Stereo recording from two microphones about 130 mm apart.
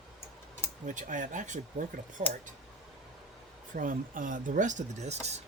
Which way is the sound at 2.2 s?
55° right (ahead or behind).